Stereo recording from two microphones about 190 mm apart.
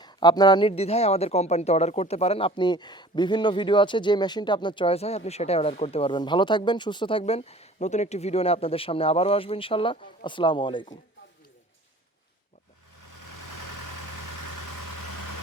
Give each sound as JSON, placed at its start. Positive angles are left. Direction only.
{"t": 0.0, "sound": "speech", "side_deg": 20}